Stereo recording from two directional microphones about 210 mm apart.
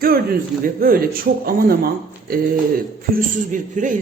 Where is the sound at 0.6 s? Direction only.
45° right (ahead or behind).